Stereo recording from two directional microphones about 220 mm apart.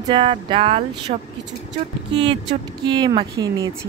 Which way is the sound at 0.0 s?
25° right (ahead or behind).